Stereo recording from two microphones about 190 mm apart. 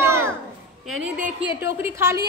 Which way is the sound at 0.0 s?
15° right (ahead or behind).